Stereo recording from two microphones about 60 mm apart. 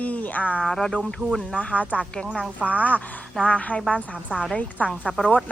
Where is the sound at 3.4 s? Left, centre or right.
Left.